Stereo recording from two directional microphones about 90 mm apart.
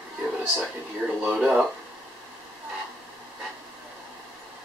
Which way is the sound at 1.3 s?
5° right (ahead or behind).